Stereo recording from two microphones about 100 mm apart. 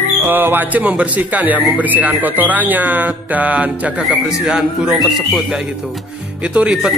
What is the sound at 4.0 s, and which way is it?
Speech, 5° right (ahead or behind).